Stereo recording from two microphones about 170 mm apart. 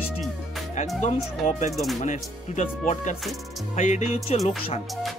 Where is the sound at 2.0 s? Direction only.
45° left (ahead or behind).